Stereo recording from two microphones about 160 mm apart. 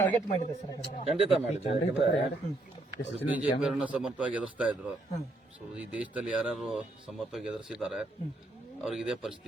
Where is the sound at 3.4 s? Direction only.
5° right (ahead or behind).